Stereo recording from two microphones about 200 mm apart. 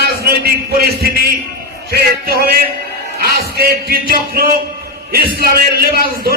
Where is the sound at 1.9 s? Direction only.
50° right (ahead or behind).